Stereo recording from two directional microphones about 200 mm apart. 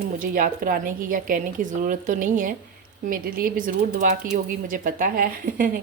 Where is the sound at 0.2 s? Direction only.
45° right (ahead or behind).